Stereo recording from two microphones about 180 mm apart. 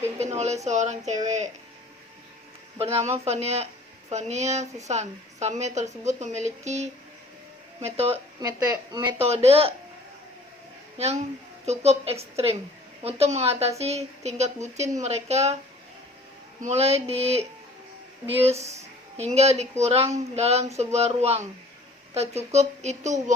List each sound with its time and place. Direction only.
0.2 s speech: 40° right (ahead or behind)
2.7 s speech: 35° right (ahead or behind)
8.1 s speech: 20° right (ahead or behind)
9.1 s speech: 35° right (ahead or behind)
10.9 s a child's voice: 35° right (ahead or behind)
16.6 s speech: 35° right (ahead or behind)